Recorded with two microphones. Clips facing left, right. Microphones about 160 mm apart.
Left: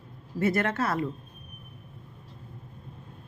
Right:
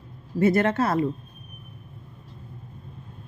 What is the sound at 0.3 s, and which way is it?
Speech, 25° right (ahead or behind).